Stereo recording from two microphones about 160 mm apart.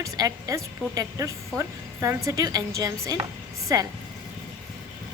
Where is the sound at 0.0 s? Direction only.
20° right (ahead or behind).